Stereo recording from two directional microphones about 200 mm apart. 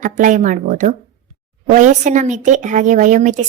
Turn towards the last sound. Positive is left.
turn(degrees=-40)  # may be behind; listen again after turning